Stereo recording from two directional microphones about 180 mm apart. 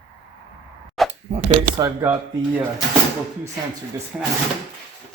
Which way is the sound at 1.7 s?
15° right (ahead or behind).